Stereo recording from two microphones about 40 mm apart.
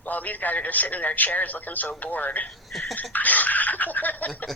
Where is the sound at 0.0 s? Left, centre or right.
Left.